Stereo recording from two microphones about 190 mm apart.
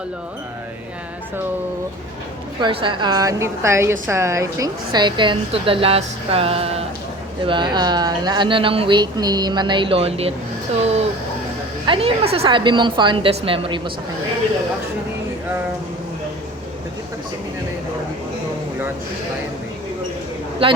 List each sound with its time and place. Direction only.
2.6 s a woman's voice: 25° right (ahead or behind)
11.9 s speech: 30° right (ahead or behind)
20.6 s speech: 30° right (ahead or behind)